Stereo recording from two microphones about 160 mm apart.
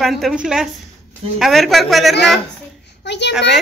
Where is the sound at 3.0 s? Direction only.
90° left.